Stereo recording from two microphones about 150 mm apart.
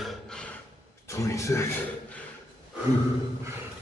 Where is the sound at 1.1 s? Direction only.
20° left (ahead or behind).